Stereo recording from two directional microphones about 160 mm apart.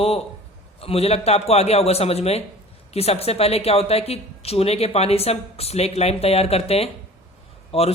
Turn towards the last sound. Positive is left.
turn(degrees=40)  # may be behind; listen again after turning